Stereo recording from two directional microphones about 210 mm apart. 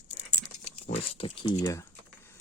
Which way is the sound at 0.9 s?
25° left (ahead or behind).